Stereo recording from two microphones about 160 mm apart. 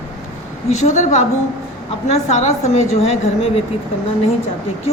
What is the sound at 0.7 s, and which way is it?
A woman's voice, 45° left (ahead or behind).